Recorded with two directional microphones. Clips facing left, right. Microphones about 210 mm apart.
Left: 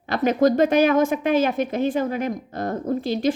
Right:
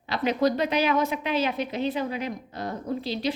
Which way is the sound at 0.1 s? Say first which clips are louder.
Left 5 dB; 45° left (ahead or behind).